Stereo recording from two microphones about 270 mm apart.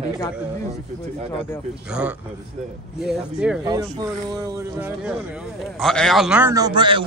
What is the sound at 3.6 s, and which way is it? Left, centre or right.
Speech, centre.